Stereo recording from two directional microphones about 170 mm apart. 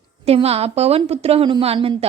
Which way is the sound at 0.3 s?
35° right (ahead or behind).